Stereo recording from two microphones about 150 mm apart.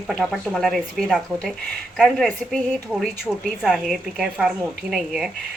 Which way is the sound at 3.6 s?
Centre (ahead or behind).